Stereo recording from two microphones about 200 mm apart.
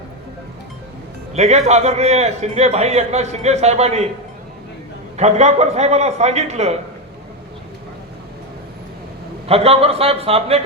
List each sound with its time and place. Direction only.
1.3 s a man's voice: 35° right (ahead or behind)
5.1 s a man's voice: 35° right (ahead or behind)
9.5 s a man's voice: 30° right (ahead or behind)